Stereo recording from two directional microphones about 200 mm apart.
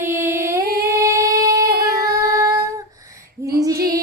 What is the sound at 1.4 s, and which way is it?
Child singing, 15° right (ahead or behind).